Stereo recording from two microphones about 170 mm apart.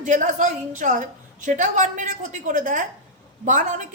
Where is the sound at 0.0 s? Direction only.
45° right (ahead or behind).